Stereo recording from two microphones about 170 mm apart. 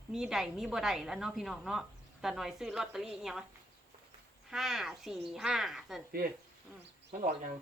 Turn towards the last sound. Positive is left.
turn(degrees=-40)  # may be behind; listen again after turning